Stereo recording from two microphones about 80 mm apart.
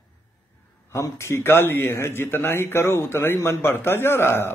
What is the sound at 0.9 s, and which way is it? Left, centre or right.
A man's voice, left.